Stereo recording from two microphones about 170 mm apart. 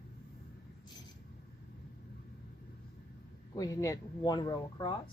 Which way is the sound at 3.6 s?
20° left (ahead or behind).